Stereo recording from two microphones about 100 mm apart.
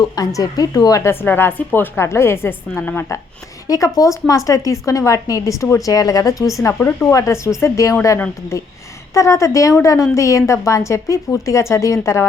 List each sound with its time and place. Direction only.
0.0 s a woman's voice: 35° left (ahead or behind)
1.1 s a woman's voice: 20° left (ahead or behind)
3.7 s a woman's voice: 35° left (ahead or behind)
9.1 s a woman's voice: 30° left (ahead or behind)